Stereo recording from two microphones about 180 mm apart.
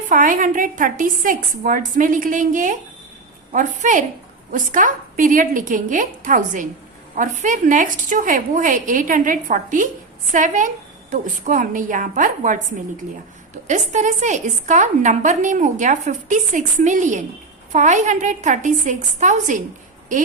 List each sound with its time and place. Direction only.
0.1 s a woman's voice: 50° right (ahead or behind)
13.7 s a woman's voice: 45° right (ahead or behind)